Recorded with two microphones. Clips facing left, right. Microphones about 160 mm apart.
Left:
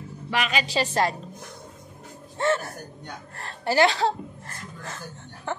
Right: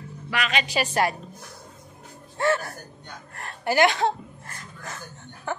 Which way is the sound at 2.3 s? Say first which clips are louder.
Even; 25° left (ahead or behind).